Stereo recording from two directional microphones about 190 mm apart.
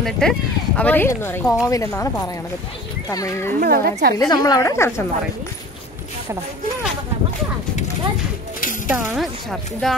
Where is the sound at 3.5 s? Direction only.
50° right (ahead or behind).